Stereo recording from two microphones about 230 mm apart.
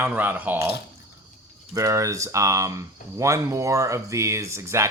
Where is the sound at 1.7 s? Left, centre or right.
Centre.